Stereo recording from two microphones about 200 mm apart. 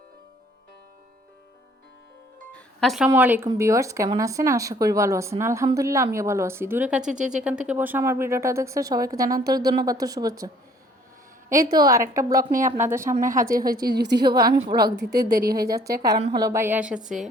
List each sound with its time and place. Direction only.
2.5 s music: 5° left (ahead or behind)
3.1 s speech: 10° right (ahead or behind)
11.5 s speech: 20° right (ahead or behind)
12.5 s speech: 40° right (ahead or behind)
12.7 s speech: 10° right (ahead or behind)
13.1 s a woman's voice: 40° right (ahead or behind)
14.7 s a woman's voice: 20° right (ahead or behind)